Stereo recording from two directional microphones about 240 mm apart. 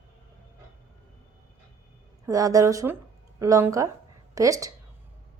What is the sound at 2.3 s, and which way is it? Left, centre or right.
A woman's voice, centre.